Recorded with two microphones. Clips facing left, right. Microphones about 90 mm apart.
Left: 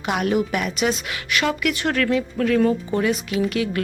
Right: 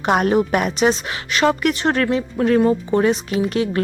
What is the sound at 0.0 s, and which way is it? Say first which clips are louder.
A woman's voice: right 5 dB; 45° right (ahead or behind).